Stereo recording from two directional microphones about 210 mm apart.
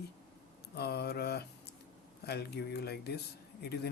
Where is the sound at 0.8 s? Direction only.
50° left (ahead or behind).